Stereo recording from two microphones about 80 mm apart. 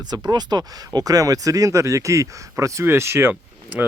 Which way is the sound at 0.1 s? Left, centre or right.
Right.